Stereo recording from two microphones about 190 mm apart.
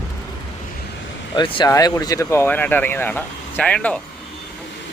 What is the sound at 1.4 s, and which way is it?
Speech, 20° left (ahead or behind).